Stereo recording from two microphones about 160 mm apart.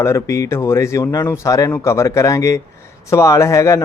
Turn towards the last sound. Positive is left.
turn(degrees=20)  # may be behind; listen again after turning